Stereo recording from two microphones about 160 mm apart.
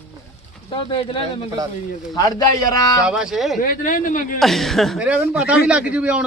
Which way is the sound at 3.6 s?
60° left (ahead or behind).